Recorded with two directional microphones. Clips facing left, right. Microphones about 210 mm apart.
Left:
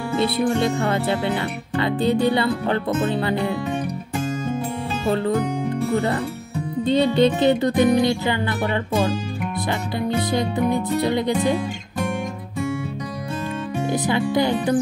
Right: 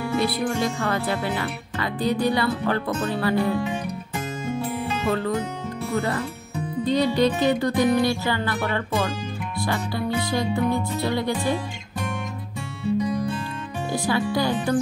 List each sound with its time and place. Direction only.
0.2 s speech: 25° left (ahead or behind)
5.0 s speech: 30° left (ahead or behind)
13.9 s speech: 20° left (ahead or behind)